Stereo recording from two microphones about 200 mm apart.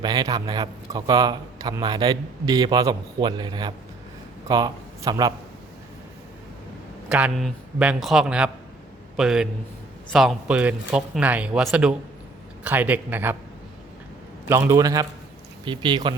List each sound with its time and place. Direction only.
0.0 s a man's voice: 20° right (ahead or behind)
7.1 s speech: 5° right (ahead or behind)
14.4 s a man's voice: 15° right (ahead or behind)